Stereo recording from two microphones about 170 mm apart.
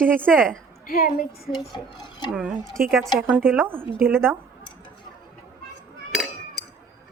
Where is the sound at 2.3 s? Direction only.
Centre (ahead or behind).